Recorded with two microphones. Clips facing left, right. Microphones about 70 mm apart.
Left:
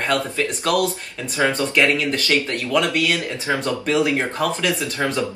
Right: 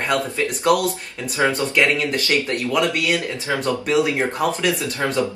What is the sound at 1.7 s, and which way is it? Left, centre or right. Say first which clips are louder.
Speech: even; right.